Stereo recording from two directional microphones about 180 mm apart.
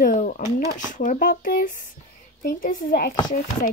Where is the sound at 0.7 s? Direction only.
45° left (ahead or behind).